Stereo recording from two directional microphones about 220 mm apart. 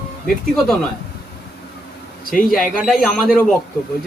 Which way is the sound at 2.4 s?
Centre (ahead or behind).